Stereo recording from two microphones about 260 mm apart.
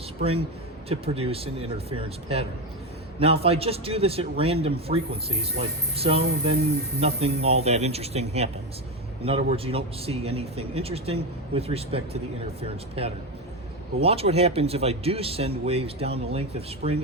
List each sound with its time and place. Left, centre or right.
0.2 s speech: right
14.0 s speech: right